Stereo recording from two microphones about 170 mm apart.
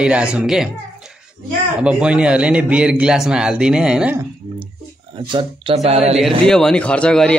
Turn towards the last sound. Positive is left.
turn(degrees=5)  # may be behind; listen again after turning